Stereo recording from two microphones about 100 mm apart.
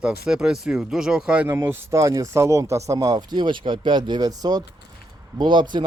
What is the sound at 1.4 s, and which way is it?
Speech, 25° right (ahead or behind).